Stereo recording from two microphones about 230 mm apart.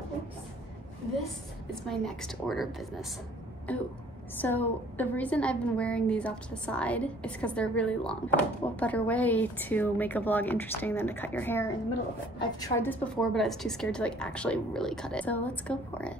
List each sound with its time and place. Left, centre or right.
1.9 s a woman's voice: centre